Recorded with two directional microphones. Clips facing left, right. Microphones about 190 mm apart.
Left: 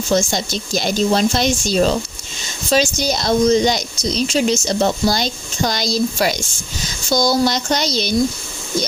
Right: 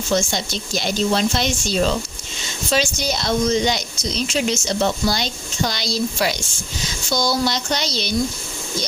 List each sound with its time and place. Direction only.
0.1 s speech: 40° left (ahead or behind)